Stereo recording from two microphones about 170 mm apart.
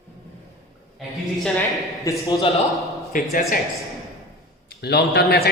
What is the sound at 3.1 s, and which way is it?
Speech, 50° left (ahead or behind).